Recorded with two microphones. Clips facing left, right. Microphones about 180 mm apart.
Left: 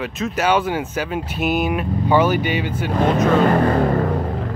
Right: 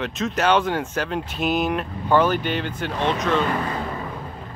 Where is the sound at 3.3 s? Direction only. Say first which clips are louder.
Left 8 dB; 50° left (ahead or behind); by 4.5 s 70° left (ahead or behind).